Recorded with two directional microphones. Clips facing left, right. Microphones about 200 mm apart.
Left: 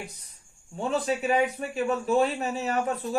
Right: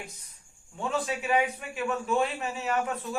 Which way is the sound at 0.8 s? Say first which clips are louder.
Left 4 dB; 35° left (ahead or behind).